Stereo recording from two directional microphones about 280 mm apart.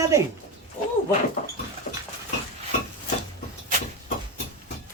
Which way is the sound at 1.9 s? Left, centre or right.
Left.